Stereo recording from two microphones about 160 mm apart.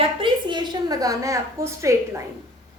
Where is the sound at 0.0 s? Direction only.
30° right (ahead or behind).